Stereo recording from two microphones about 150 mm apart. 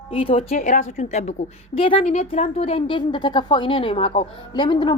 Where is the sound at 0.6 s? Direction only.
50° left (ahead or behind).